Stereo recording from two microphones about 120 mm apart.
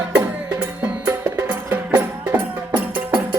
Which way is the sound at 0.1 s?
10° right (ahead or behind).